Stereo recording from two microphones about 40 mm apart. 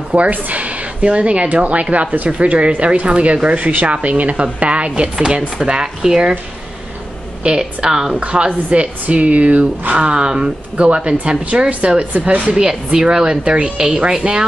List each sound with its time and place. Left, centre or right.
0.1 s speech: right; by 6.3 s centre
7.4 s a woman's voice: right
8.2 s speech: right
12.0 s speech: right
12.5 s speech: right